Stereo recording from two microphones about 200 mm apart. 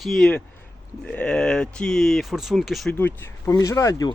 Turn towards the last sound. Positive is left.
turn(degrees=15)  # may be behind; listen again after turning